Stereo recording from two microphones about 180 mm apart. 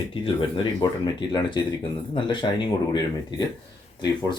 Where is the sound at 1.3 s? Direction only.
25° left (ahead or behind).